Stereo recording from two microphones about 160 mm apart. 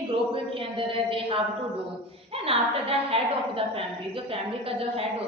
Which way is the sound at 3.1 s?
35° right (ahead or behind).